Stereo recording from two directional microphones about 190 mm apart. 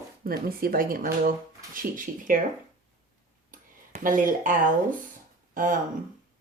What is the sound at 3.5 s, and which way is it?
Tick-tock, 45° right (ahead or behind).